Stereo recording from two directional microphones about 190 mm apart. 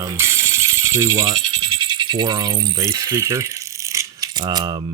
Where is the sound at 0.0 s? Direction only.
15° right (ahead or behind).